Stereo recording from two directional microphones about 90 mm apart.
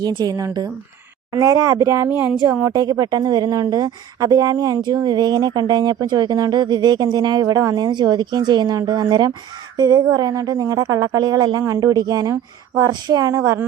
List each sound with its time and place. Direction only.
0.0 s a woman's voice: 50° right (ahead or behind); by 2.3 s 25° right (ahead or behind)
2.6 s speech: 40° right (ahead or behind)